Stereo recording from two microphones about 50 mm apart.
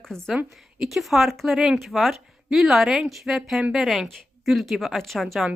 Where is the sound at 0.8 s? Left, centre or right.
Centre.